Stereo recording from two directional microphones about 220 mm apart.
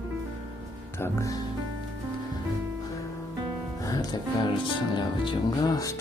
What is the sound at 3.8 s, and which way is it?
Music, 15° left (ahead or behind).